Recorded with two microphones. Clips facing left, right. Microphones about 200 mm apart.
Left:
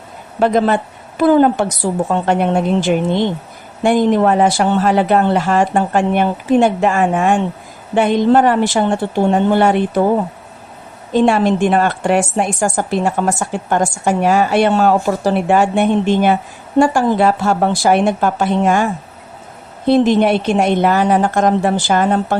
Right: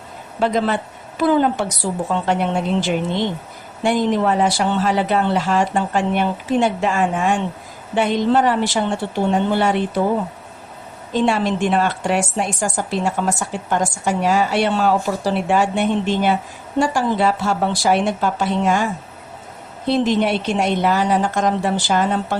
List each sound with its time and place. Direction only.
0.3 s a woman's voice: 50° left (ahead or behind)
11.1 s a woman's voice: 55° left (ahead or behind)
19.9 s a woman's voice: 55° left (ahead or behind)